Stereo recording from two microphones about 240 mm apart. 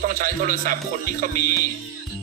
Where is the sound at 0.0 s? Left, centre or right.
Right.